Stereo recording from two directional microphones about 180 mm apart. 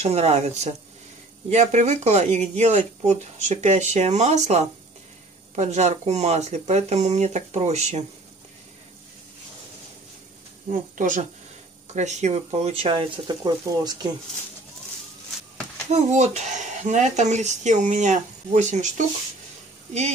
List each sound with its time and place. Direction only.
0.0 s speech: 35° right (ahead or behind)
10.7 s speech: 45° right (ahead or behind); by 14.1 s 25° right (ahead or behind)
15.9 s speech: 40° right (ahead or behind)